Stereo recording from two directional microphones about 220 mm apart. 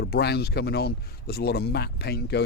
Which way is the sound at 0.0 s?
45° left (ahead or behind).